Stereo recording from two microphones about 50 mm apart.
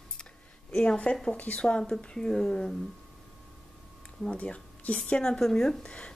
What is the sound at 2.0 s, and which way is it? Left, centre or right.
Speech, centre.